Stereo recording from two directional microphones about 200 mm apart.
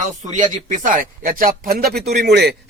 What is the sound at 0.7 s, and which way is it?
Speech, 40° right (ahead or behind).